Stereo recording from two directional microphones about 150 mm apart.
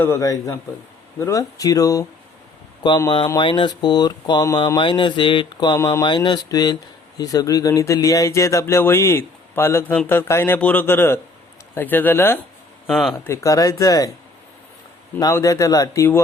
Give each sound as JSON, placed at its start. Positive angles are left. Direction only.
{"t": 0.0, "sound": "speech", "side_deg": 20}
{"t": 12.9, "sound": "speech", "side_deg": 0}
{"t": 13.1, "sound": "speech", "side_deg": 20}
{"t": 15.2, "sound": "speech", "side_deg": 20}